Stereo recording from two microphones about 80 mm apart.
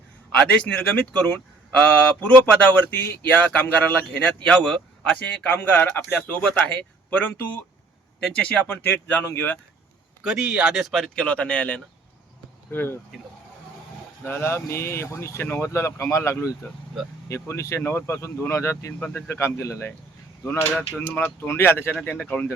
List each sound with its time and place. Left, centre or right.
0.3 s speech: centre
5.4 s speech: left
8.6 s speech: left
10.2 s speech: centre; by 13.0 s left
14.3 s speech: left
17.5 s speech: left
18.9 s speech: centre
19.3 s speech: left